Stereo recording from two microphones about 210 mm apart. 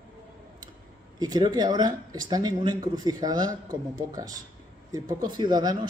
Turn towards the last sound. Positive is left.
turn(degrees=-20)  # may be behind; listen again after turning